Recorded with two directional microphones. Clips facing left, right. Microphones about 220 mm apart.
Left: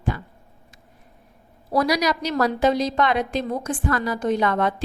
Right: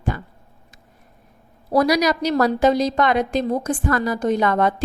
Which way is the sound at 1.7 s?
40° right (ahead or behind).